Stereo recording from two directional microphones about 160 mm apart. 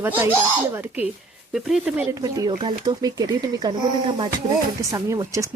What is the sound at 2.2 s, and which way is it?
Speech, 20° right (ahead or behind).